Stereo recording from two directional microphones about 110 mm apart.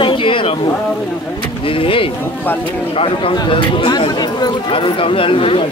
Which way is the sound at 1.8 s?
55° left (ahead or behind).